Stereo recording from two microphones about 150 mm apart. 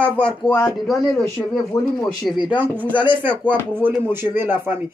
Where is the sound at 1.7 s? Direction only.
20° left (ahead or behind).